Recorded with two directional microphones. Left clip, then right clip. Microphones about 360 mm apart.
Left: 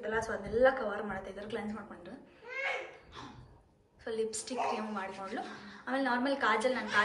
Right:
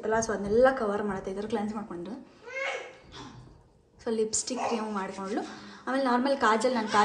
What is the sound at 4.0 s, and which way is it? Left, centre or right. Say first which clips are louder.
Speech: right 6 dB; centre.